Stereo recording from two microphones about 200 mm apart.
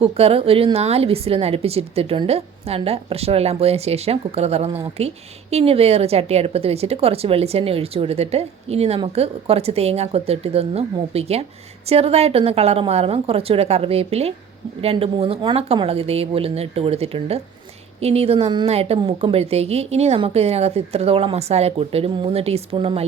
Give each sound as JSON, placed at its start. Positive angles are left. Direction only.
{"t": 0.0, "sound": "a woman's voice", "side_deg": -30}